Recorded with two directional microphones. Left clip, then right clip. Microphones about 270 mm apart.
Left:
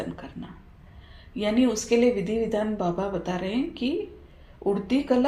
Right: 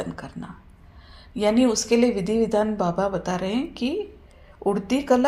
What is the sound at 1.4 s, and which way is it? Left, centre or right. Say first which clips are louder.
Speech: right 4 dB; right.